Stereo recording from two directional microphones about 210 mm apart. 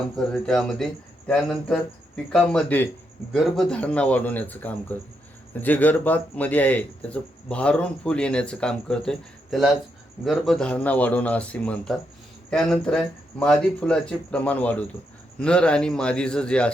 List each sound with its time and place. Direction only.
0.2 s a man's voice: centre (ahead or behind)